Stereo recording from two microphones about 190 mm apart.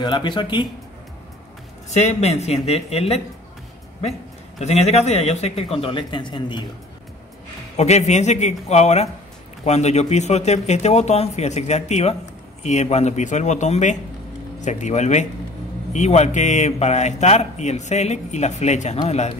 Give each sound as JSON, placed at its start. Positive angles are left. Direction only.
{"t": 0.0, "sound": "speech", "side_deg": 25}
{"t": 1.9, "sound": "speech", "side_deg": 35}
{"t": 4.6, "sound": "speech", "side_deg": 35}
{"t": 7.7, "sound": "speech", "side_deg": 35}